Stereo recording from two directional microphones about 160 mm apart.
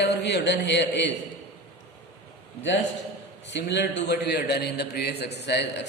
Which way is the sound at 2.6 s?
90° left.